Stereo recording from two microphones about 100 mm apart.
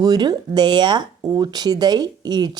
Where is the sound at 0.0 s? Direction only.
45° right (ahead or behind).